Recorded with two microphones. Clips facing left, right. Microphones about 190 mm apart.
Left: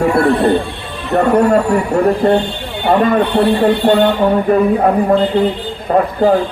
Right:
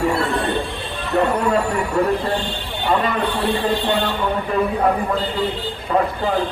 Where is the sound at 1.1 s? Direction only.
50° left (ahead or behind).